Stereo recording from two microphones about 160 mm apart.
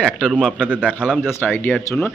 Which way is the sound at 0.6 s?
5° right (ahead or behind).